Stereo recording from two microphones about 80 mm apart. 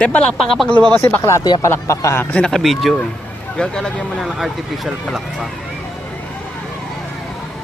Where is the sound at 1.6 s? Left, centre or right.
Left.